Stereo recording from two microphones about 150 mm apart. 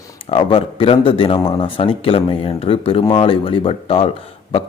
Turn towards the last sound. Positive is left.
turn(degrees=40)  # may be behind; listen again after turning